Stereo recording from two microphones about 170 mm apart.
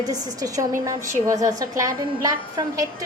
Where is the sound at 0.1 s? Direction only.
20° right (ahead or behind).